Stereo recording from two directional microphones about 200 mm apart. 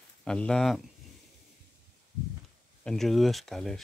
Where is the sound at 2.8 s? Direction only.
Centre (ahead or behind).